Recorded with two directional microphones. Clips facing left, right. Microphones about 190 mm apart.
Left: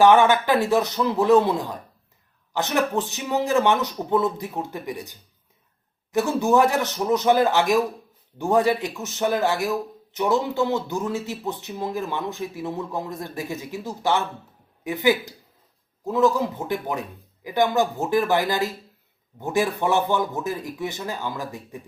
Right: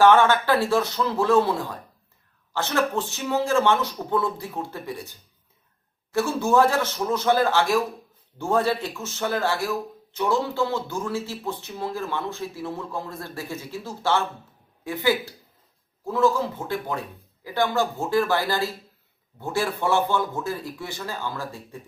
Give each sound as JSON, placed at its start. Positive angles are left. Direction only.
{"t": 0.0, "sound": "speech", "side_deg": 15}